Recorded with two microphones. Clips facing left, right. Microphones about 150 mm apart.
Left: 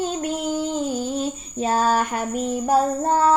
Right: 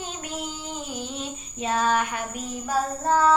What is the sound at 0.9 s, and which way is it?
Child singing, 40° left (ahead or behind).